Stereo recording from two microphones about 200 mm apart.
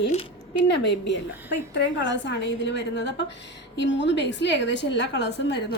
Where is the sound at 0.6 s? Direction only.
65° left (ahead or behind).